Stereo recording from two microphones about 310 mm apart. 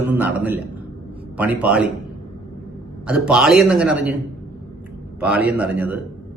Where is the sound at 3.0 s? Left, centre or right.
Centre.